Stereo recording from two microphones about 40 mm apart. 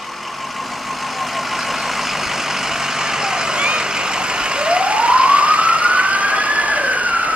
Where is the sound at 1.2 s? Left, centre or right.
Centre.